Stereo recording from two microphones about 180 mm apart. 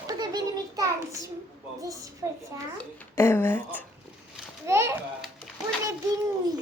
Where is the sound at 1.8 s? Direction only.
20° right (ahead or behind).